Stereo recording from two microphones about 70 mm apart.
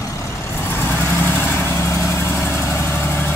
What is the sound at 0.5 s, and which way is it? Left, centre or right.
Vehicle, left.